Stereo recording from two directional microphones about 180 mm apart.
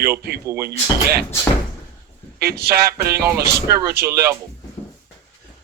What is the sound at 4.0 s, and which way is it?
Speech, 65° right (ahead or behind).